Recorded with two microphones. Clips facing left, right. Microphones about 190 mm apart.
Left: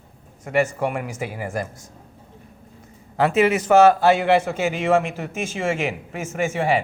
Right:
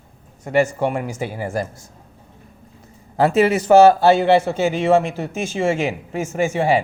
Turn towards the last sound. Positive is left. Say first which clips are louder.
# right 3 dB
turn(degrees=-30)  # may be behind; listen again after turning